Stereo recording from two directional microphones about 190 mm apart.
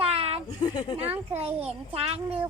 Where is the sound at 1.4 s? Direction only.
30° right (ahead or behind).